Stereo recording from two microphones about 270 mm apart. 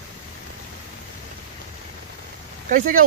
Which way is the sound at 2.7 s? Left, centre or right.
Right.